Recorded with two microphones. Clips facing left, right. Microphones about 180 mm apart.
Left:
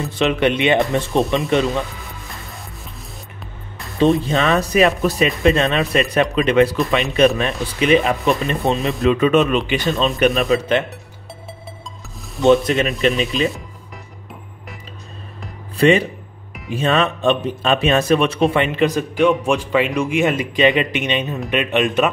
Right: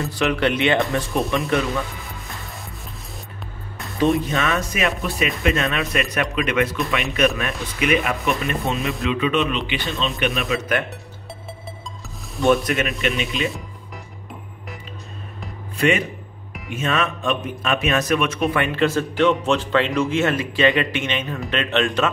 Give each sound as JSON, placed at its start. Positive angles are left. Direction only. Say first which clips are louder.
{"t": 0.1, "sound": "a man's voice", "louder": "left 4 dB", "side_deg": 20}
{"t": 4.2, "sound": "a man's voice", "louder": "left 5 dB", "side_deg": 30}
{"t": 12.4, "sound": "speech", "louder": "left 4 dB", "side_deg": 0}
{"t": 15.8, "sound": "a man's voice", "louder": "left 6 dB", "side_deg": 35}